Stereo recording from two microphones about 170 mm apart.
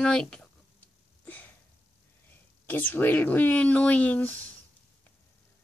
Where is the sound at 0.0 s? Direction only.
5° left (ahead or behind).